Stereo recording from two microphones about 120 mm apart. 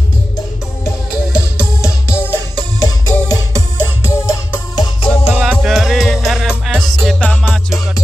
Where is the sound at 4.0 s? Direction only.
25° left (ahead or behind).